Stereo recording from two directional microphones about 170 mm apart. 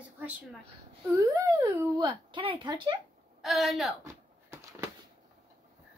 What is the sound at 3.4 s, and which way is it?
Speech, centre (ahead or behind).